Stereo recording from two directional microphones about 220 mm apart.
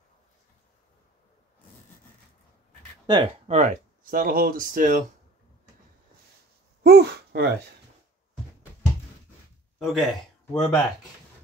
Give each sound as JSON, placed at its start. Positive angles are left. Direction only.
{"t": 3.1, "sound": "speech", "side_deg": -25}
{"t": 6.8, "sound": "a sound", "side_deg": -45}
{"t": 9.8, "sound": "speech", "side_deg": 0}